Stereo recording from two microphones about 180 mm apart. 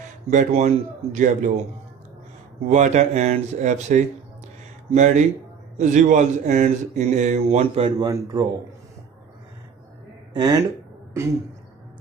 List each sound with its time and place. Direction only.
0.0 s speech: 45° right (ahead or behind)
2.7 s a man's voice: 40° right (ahead or behind); by 8.5 s 25° right (ahead or behind)
10.3 s speech: 25° right (ahead or behind)